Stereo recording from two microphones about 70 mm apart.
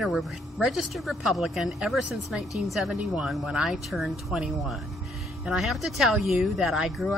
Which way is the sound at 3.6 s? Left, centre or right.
Centre.